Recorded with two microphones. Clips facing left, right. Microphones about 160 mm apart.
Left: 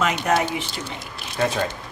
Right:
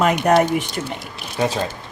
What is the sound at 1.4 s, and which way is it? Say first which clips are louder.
Speech: right 2 dB; 10° right (ahead or behind).